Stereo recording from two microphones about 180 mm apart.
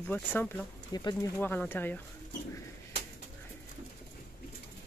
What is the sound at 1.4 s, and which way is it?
Speech, 10° left (ahead or behind).